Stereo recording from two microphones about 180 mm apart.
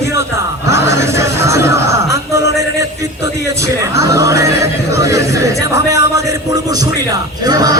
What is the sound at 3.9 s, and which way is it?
A man's voice, 15° right (ahead or behind).